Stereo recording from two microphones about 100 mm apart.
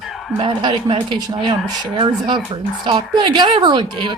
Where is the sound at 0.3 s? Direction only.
55° right (ahead or behind).